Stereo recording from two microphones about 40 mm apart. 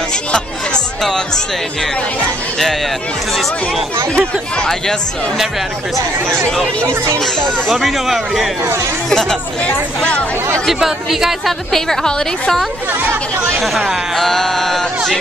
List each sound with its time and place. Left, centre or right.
0.1 s music: left
1.0 s a woman's voice: centre
7.2 s a woman's voice: centre
7.7 s speech: centre
9.1 s a woman's voice: centre
10.7 s speech: centre
11.7 s a woman's voice: centre
13.6 s a woman's voice: centre